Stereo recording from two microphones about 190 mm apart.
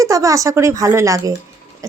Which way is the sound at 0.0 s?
15° right (ahead or behind).